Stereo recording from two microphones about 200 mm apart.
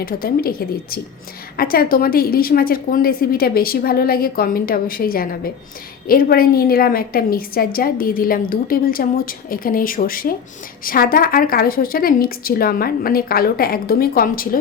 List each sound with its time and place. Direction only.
0.0 s a woman's voice: 45° left (ahead or behind)